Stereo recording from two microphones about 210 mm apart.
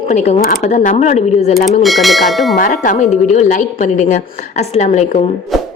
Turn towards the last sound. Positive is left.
turn(degrees=30)  # may be behind; listen again after turning